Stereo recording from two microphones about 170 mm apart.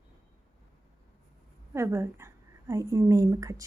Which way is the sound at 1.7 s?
15° right (ahead or behind).